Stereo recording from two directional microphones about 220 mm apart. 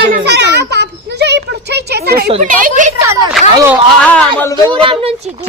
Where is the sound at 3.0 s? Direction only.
15° right (ahead or behind).